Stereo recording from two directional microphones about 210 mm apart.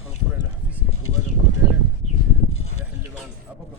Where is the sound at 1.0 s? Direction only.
90° left.